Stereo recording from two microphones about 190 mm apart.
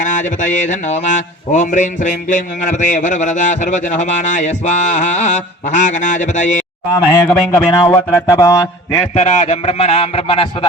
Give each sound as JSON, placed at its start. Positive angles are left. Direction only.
{"t": 0.0, "sound": "a sound", "side_deg": 40}
{"t": 1.5, "sound": "music", "side_deg": 40}
{"t": 6.9, "sound": "speech", "side_deg": 20}
{"t": 7.9, "sound": "mantra", "side_deg": 15}
{"t": 9.1, "sound": "music", "side_deg": 35}